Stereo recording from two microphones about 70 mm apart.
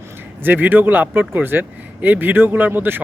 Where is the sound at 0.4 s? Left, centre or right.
Right.